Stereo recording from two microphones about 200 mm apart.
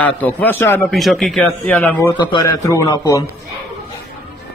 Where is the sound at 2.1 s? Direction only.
20° left (ahead or behind).